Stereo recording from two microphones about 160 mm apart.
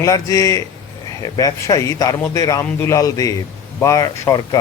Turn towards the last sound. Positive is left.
turn(degrees=20)  # may be behind; listen again after turning